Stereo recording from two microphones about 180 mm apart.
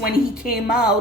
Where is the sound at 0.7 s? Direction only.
5° right (ahead or behind).